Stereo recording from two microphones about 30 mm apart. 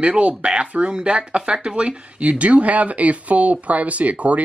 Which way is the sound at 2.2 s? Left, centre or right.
Right.